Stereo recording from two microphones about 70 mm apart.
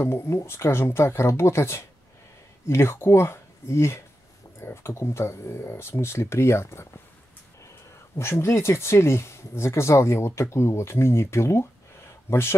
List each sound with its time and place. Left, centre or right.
0.0 s speech: left
8.2 s speech: left